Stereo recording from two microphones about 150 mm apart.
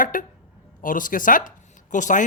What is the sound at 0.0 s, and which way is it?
Speech, 65° left (ahead or behind).